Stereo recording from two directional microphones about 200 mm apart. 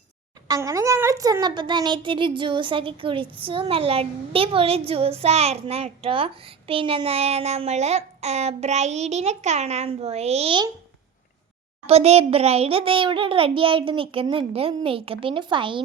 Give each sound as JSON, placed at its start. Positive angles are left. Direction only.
{"t": 0.4, "sound": "a child's voice", "side_deg": -15}
{"t": 11.9, "sound": "a child's voice", "side_deg": -30}